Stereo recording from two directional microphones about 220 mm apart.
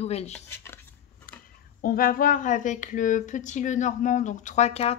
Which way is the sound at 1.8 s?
40° left (ahead or behind).